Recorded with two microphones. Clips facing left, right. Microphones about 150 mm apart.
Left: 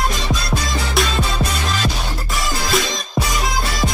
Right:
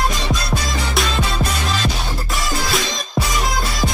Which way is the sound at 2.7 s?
Centre (ahead or behind).